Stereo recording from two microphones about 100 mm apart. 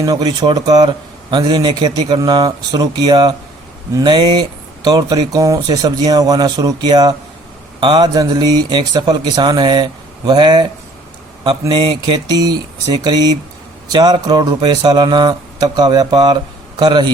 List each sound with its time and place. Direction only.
0.0 s speech: 40° right (ahead or behind)
11.7 s speech: 50° right (ahead or behind)